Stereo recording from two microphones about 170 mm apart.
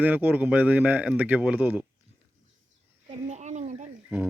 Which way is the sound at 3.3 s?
45° right (ahead or behind).